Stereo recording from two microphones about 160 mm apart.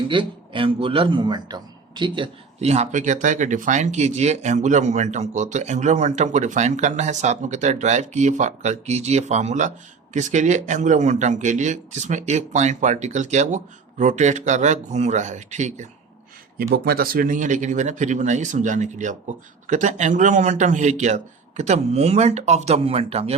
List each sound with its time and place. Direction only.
0.1 s speech: 30° right (ahead or behind); by 15.9 s 50° right (ahead or behind)
16.6 s speech: 75° right (ahead or behind); by 23.3 s 40° right (ahead or behind)